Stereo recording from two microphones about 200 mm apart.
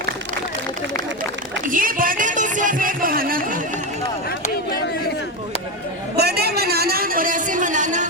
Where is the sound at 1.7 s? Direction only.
45° right (ahead or behind).